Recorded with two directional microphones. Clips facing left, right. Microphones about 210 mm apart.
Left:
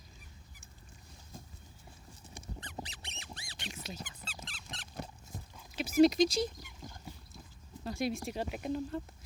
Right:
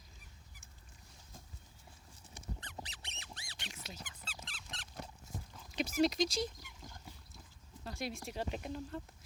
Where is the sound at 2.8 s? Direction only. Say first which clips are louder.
Left 4 dB; 10° left (ahead or behind).